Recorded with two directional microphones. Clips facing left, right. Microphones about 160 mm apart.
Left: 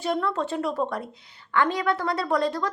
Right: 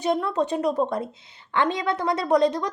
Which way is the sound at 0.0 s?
20° right (ahead or behind).